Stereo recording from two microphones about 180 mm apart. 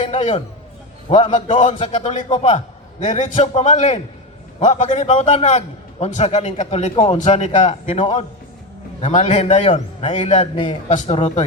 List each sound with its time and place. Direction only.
0.0 s a man's voice: 40° left (ahead or behind)